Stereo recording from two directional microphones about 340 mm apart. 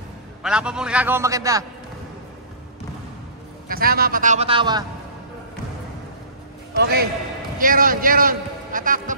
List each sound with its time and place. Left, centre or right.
0.4 s a man's voice: centre
3.6 s a man's voice: right
6.8 s a man's voice: right